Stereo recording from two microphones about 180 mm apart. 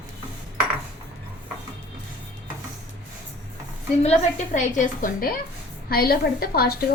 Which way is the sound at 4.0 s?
40° left (ahead or behind).